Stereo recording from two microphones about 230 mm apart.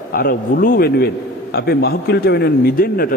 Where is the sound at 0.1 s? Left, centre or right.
Left.